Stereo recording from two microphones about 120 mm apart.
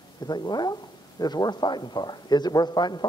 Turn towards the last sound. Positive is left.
turn(degrees=35)  # may be behind; listen again after turning